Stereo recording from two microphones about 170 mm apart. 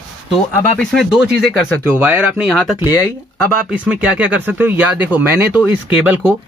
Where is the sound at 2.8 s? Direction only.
20° left (ahead or behind).